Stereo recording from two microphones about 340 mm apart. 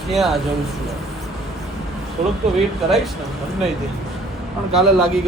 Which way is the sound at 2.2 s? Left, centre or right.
Right.